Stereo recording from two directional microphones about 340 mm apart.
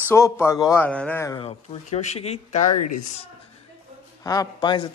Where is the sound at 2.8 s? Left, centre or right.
Left.